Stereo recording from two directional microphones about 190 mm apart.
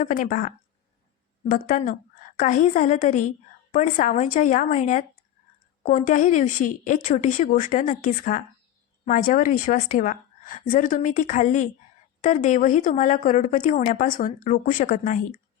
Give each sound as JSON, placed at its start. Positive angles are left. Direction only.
{"t": 0.0, "sound": "a woman's voice", "side_deg": 45}